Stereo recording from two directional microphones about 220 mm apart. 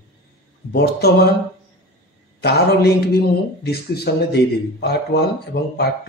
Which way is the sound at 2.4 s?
45° left (ahead or behind).